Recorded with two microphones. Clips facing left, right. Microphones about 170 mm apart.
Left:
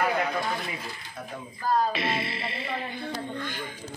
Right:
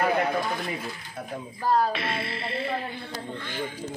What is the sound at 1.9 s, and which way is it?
Speech, centre (ahead or behind).